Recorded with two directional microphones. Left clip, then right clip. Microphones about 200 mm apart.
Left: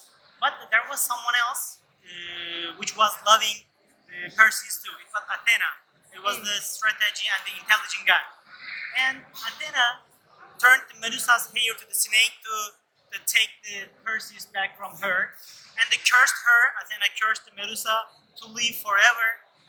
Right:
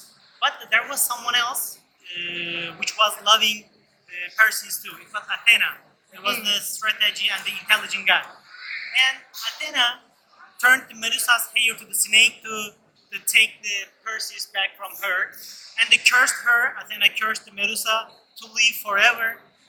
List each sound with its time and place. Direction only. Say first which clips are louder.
0.3 s a woman's voice: right 2 dB; 5° left (ahead or behind); by 8.2 s 25° left (ahead or behind)
8.9 s a man's voice: right 5 dB; 15° left (ahead or behind)